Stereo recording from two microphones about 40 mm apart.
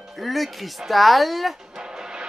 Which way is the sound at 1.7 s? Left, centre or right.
Centre.